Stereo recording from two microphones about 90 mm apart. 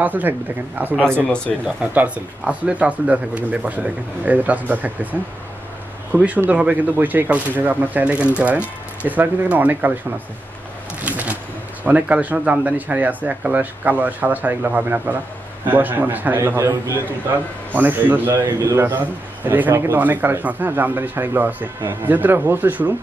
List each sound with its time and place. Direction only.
0.0 s speech: 20° right (ahead or behind)
6.1 s speech: 15° right (ahead or behind)
11.0 s shuffling cards: 15° right (ahead or behind)
11.8 s speech: 15° right (ahead or behind); by 17.0 s 35° right (ahead or behind)
17.7 s speech: 20° right (ahead or behind)
18.3 s a man's voice: 35° right (ahead or behind)
19.4 s speech: 20° right (ahead or behind)